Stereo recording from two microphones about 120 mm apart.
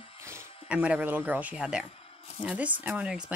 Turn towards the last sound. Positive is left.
turn(degrees=-10)  # may be behind; listen again after turning